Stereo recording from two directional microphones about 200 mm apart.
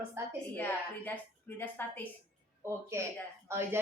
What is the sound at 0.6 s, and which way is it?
A woman's voice, 10° left (ahead or behind).